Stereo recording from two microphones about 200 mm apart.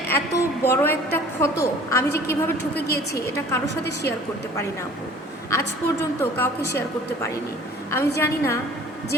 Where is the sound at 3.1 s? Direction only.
15° left (ahead or behind).